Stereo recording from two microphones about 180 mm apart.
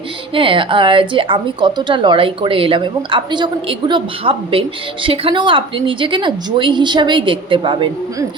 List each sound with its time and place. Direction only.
0.3 s a woman's voice: 30° right (ahead or behind)